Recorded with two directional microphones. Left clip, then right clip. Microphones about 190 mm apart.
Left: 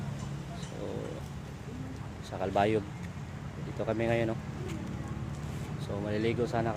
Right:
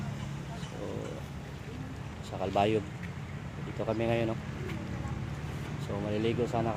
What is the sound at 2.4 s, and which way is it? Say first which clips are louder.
Speech: even; 5° right (ahead or behind).